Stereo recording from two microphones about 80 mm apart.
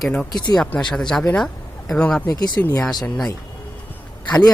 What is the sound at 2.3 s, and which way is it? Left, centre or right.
Speech, left.